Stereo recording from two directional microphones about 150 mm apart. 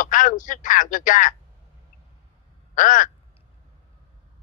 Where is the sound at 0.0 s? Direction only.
60° left (ahead or behind).